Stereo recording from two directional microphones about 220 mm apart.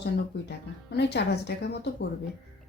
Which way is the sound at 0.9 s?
50° left (ahead or behind).